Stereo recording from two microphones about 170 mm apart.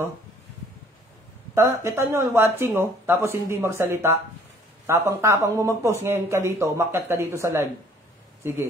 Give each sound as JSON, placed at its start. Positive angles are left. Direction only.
{"t": 1.5, "sound": "speech", "side_deg": -15}